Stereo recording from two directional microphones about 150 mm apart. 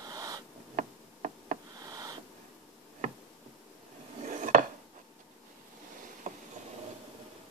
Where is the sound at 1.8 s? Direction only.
25° right (ahead or behind).